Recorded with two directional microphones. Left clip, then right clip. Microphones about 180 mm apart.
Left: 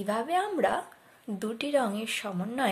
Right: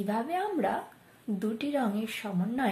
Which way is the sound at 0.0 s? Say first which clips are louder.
Left 3 dB; 50° left (ahead or behind).